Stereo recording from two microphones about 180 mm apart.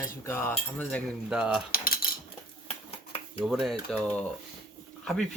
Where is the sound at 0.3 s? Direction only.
15° left (ahead or behind).